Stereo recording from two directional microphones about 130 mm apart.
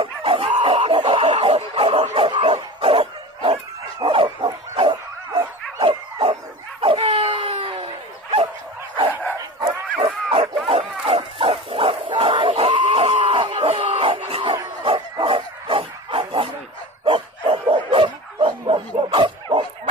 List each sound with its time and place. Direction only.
0.0 s dog: 45° right (ahead or behind)
4.0 s bow-wow: 40° right (ahead or behind)
5.8 s dog: 40° right (ahead or behind)
15.3 s bow-wow: 45° right (ahead or behind)